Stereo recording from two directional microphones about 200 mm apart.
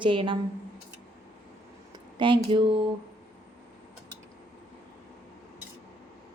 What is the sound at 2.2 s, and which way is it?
Speech, 25° right (ahead or behind).